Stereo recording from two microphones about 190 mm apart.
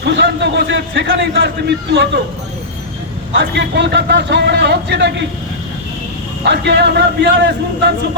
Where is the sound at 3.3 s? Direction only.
65° right (ahead or behind).